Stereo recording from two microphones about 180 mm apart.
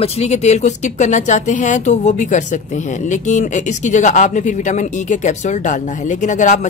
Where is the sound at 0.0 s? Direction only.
35° left (ahead or behind).